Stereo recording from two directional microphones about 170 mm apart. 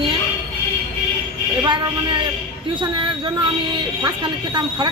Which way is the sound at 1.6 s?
25° right (ahead or behind).